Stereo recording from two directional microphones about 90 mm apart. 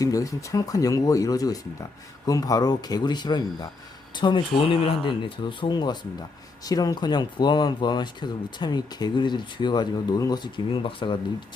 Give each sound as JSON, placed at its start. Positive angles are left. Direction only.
{"t": 0.0, "sound": "speech", "side_deg": 40}
{"t": 4.6, "sound": "speech", "side_deg": 90}